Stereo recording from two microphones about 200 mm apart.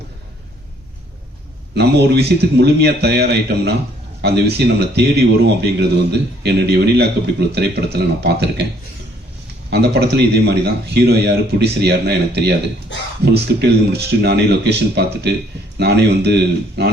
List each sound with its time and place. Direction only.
1.7 s a man's voice: 55° right (ahead or behind)
9.6 s a man's voice: 55° right (ahead or behind)